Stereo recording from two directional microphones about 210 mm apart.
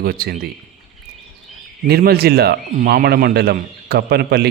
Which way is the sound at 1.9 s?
45° right (ahead or behind).